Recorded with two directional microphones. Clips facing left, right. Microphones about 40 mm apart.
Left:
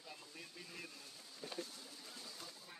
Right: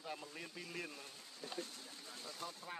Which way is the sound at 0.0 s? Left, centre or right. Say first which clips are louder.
Right 8 dB; right.